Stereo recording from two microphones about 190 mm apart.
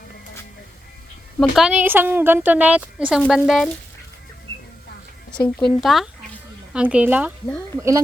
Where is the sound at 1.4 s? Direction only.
Centre (ahead or behind).